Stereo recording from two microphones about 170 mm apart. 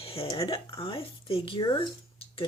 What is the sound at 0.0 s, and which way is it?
Speech, 35° left (ahead or behind).